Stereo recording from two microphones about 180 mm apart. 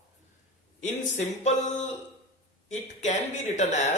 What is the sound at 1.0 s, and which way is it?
Speech, 40° left (ahead or behind).